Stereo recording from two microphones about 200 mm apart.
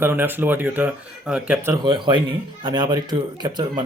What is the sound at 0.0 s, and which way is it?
Speech, 10° right (ahead or behind).